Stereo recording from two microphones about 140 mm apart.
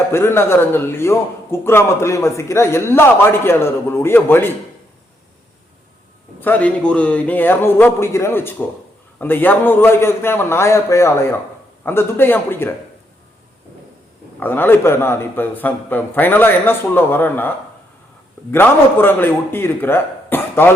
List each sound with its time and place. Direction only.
0.1 s a man's voice: 15° left (ahead or behind)
6.4 s a man's voice: 10° left (ahead or behind)
14.3 s a man's voice: 15° left (ahead or behind)
18.5 s a man's voice: 15° left (ahead or behind)